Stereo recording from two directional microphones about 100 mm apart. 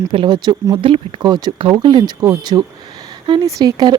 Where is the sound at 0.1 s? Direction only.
50° right (ahead or behind).